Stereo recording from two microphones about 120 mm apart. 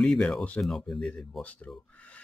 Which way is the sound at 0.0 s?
Centre (ahead or behind).